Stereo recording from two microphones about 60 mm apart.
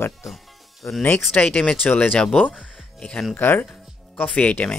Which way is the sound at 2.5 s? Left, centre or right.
Centre.